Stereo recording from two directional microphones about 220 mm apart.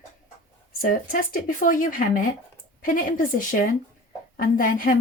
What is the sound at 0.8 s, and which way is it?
Speech, 40° left (ahead or behind).